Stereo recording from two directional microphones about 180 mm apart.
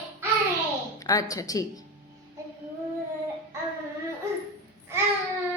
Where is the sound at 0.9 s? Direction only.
20° left (ahead or behind).